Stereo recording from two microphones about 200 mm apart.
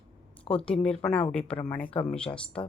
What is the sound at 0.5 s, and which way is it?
Speech, 5° left (ahead or behind).